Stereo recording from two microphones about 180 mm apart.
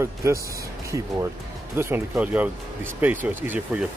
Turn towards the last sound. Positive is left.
turn(degrees=-10)  # may be behind; listen again after turning